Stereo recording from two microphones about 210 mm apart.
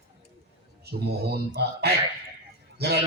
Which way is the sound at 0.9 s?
50° right (ahead or behind).